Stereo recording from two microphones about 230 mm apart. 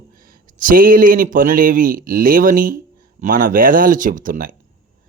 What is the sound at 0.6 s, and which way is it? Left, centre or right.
A man's voice, right.